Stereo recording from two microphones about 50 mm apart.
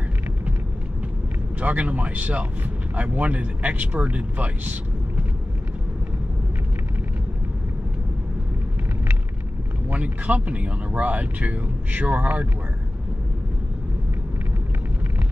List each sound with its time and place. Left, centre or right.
1.6 s speech: right
9.9 s speech: right